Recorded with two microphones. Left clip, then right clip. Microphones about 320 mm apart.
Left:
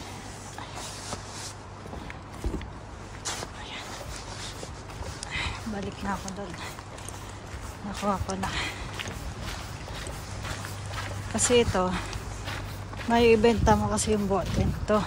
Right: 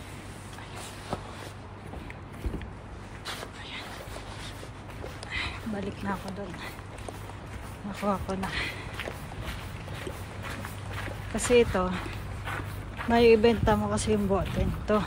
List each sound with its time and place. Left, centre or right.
5.3 s frog: centre
8.0 s speech: centre
11.3 s speech: centre
13.1 s speech: centre